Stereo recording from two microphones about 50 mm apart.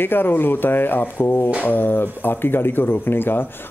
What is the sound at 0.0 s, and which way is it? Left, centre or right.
Speech, left.